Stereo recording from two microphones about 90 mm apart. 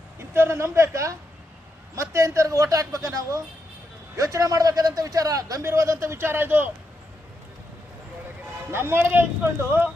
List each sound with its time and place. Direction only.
0.2 s speech: 30° right (ahead or behind)
8.7 s speech: 25° right (ahead or behind)